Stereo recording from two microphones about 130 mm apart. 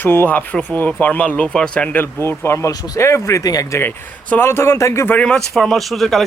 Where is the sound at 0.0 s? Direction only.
15° left (ahead or behind).